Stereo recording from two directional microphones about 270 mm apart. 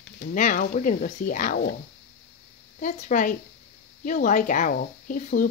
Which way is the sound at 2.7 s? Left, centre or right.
Left.